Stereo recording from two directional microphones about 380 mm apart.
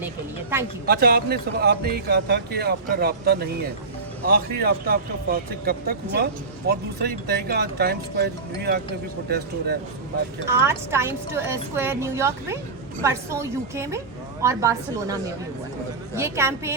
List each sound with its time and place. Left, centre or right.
0.9 s speech: right
10.5 s speech: centre
16.1 s speech: centre